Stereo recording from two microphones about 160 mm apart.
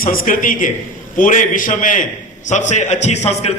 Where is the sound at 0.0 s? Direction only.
60° left (ahead or behind).